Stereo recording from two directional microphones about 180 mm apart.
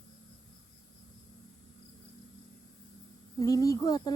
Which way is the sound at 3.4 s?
20° left (ahead or behind).